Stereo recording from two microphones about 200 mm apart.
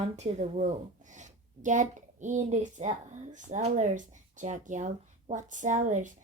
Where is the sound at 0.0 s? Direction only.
35° right (ahead or behind).